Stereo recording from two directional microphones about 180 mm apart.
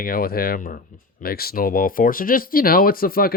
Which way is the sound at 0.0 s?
55° left (ahead or behind).